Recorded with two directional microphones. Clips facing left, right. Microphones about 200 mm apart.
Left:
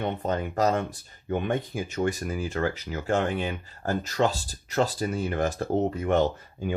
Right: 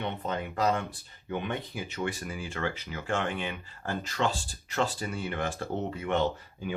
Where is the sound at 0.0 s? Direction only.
45° left (ahead or behind).